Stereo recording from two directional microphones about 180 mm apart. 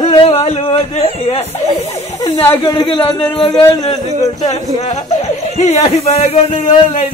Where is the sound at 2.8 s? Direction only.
30° left (ahead or behind).